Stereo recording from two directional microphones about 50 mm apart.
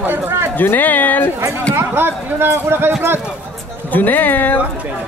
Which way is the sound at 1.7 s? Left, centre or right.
Right.